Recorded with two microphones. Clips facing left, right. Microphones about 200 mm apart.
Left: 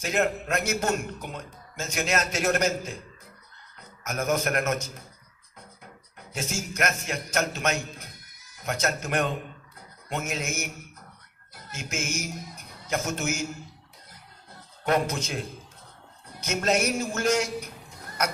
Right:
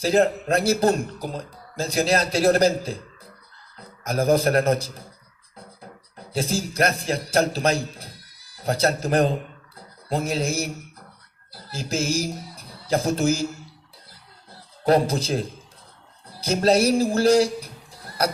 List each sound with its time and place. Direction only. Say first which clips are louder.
0.0 s a man's voice: right 7 dB; 35° right (ahead or behind)
14.1 s music: right 1 dB; 35° right (ahead or behind)
16.3 s speech: right 7 dB; 35° right (ahead or behind)